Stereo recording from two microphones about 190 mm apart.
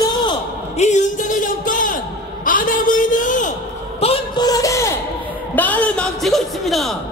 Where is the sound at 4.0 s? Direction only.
25° left (ahead or behind); by 7.0 s centre (ahead or behind).